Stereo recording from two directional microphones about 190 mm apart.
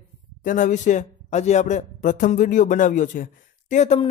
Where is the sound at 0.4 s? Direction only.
45° left (ahead or behind).